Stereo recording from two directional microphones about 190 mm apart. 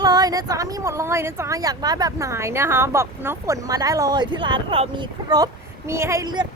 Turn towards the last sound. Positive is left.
turn(degrees=-20)  # may be behind; listen again after turning